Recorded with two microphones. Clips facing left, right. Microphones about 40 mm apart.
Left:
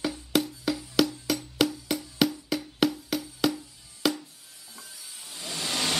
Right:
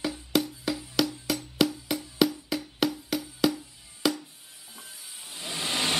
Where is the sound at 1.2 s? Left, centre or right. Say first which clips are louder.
Even; centre.